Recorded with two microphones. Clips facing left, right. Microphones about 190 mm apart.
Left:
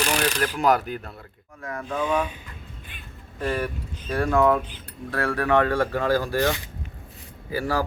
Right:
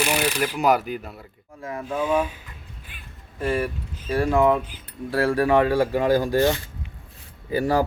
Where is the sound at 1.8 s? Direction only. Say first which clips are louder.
Right 2 dB; 5° right (ahead or behind).